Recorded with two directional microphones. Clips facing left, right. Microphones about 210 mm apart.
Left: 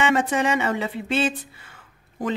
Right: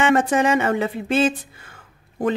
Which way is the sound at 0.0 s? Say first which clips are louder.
Right 4 dB; 50° right (ahead or behind).